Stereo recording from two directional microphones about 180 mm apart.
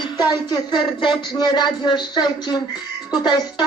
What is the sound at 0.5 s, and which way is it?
A woman's voice, 25° left (ahead or behind).